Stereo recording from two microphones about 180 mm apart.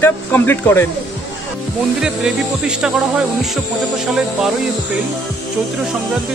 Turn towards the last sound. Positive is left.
turn(degrees=0)  # may be behind; listen again after turning